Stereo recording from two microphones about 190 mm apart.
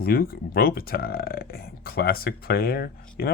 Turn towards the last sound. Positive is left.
turn(degrees=55)  # may be behind; listen again after turning